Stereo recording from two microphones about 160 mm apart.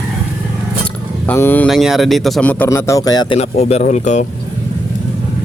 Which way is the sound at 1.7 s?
Centre (ahead or behind).